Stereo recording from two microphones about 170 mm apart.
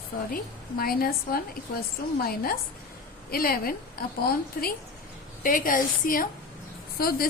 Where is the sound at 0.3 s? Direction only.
60° left (ahead or behind).